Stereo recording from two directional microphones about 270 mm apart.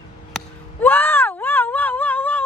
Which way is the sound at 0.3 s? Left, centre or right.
Centre.